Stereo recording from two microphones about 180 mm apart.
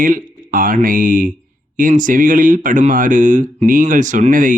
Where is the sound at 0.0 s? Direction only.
50° right (ahead or behind).